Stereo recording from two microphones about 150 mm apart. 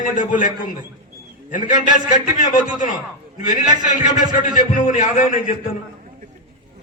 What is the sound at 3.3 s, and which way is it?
A man's voice, 60° left (ahead or behind).